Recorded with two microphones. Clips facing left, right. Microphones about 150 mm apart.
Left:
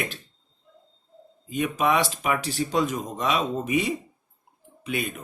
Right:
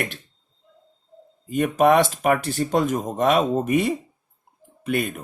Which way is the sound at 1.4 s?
50° right (ahead or behind).